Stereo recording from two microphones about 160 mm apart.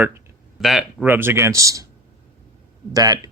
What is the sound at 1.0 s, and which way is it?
Speech, 15° right (ahead or behind).